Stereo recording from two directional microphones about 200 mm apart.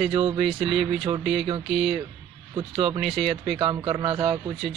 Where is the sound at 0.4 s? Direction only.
Centre (ahead or behind).